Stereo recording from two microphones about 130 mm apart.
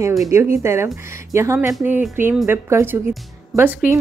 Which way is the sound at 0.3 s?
20° right (ahead or behind).